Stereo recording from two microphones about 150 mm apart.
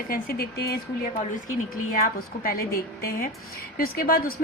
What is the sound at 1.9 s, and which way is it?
A woman's voice, 70° left (ahead or behind).